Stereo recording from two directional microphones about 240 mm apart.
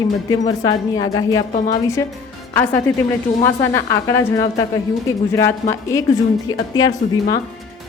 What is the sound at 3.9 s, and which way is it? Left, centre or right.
A woman's voice, centre.